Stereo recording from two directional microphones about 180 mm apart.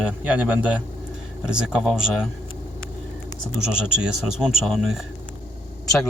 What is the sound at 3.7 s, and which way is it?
Speech, 5° right (ahead or behind).